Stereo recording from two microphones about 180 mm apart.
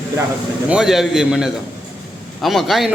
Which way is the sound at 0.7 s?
5° right (ahead or behind).